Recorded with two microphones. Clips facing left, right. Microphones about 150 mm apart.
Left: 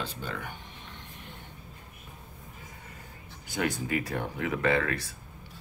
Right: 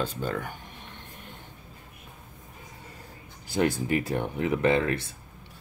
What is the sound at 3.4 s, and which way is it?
Speech, 30° right (ahead or behind).